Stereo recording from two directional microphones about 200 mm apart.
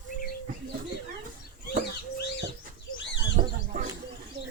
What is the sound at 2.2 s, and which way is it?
Chicken, 55° left (ahead or behind).